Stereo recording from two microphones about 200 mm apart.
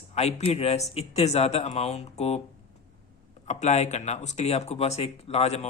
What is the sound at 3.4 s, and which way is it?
Speech, 35° left (ahead or behind).